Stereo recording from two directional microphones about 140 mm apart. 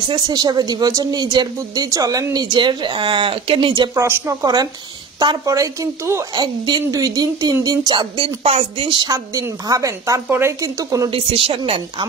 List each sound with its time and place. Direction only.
0.1 s speech: 30° right (ahead or behind)
3.9 s speech: 20° right (ahead or behind)
11.1 s speech: 40° right (ahead or behind)